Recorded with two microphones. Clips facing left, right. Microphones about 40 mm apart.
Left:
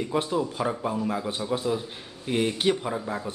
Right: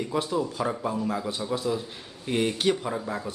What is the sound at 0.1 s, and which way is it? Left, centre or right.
Speech, centre.